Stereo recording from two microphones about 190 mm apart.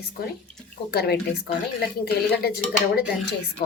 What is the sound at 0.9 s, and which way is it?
A woman's voice, 55° left (ahead or behind).